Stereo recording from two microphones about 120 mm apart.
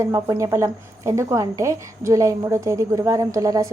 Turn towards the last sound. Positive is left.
turn(degrees=-30)  # may be behind; listen again after turning